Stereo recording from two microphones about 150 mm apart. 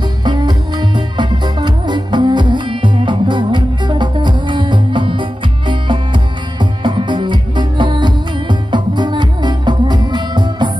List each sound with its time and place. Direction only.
0.2 s music: 30° right (ahead or behind)